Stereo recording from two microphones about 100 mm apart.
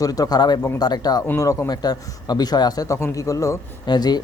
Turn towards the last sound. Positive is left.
turn(degrees=45)  # may be behind; listen again after turning